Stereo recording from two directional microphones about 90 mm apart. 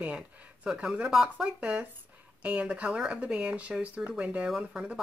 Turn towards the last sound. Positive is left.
turn(degrees=-10)  # may be behind; listen again after turning